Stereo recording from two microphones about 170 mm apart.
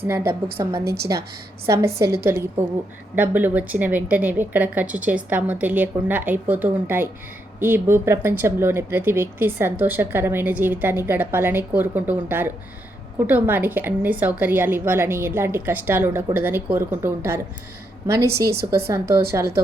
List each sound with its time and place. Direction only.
0.1 s a woman's voice: 15° right (ahead or behind)
18.3 s a woman's voice: 70° right (ahead or behind)
18.7 s speech: 15° right (ahead or behind)